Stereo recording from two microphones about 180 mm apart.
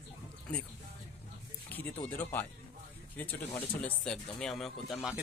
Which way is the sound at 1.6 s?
10° left (ahead or behind).